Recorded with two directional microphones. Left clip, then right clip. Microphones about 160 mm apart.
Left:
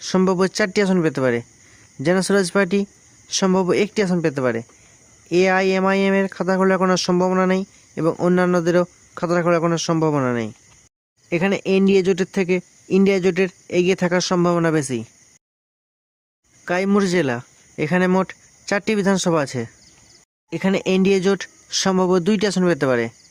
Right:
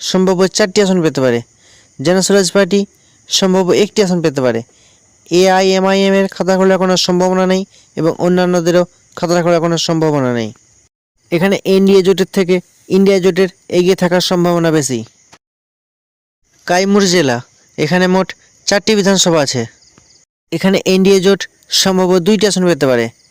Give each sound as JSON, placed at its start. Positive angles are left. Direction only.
{"t": 0.0, "sound": "speech", "side_deg": -30}
{"t": 11.3, "sound": "speech", "side_deg": -45}
{"t": 16.6, "sound": "speech", "side_deg": -35}
{"t": 20.5, "sound": "speech", "side_deg": -40}